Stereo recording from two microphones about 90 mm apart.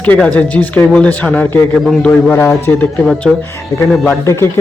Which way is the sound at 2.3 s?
30° left (ahead or behind).